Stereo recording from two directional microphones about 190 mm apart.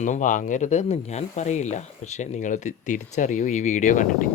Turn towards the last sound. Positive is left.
turn(degrees=40)  # may be behind; listen again after turning